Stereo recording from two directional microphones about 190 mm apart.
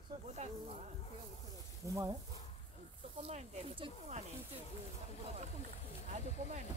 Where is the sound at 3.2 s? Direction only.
35° right (ahead or behind).